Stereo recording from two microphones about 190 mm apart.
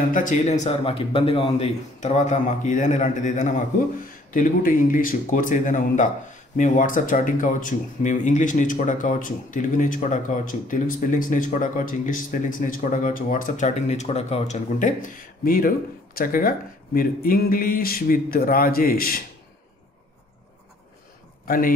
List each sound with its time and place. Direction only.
0.1 s a man's voice: 45° left (ahead or behind)
21.5 s speech: 50° left (ahead or behind)